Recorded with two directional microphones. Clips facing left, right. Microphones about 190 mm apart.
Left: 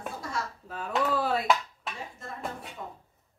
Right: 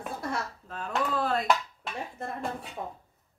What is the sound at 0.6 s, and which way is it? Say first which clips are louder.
Speech: left 4 dB; 5° left (ahead or behind).